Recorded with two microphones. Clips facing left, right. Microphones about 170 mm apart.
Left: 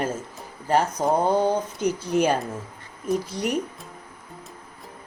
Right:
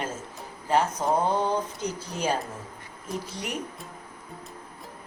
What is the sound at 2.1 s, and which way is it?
Speech, 60° left (ahead or behind).